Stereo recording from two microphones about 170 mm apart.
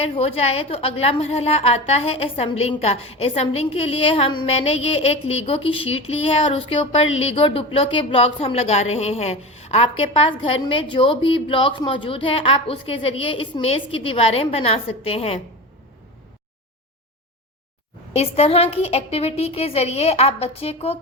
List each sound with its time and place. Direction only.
0.0 s a woman's voice: 35° left (ahead or behind)
18.1 s a woman's voice: 40° left (ahead or behind)